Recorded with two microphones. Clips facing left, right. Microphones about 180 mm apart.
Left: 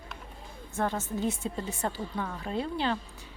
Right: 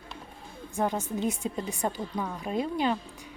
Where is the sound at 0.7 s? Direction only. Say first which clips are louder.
Right 2 dB; 15° right (ahead or behind).